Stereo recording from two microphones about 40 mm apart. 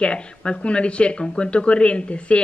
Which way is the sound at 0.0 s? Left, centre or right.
Left.